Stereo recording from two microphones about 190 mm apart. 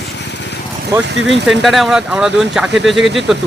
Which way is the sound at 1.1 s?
70° right (ahead or behind).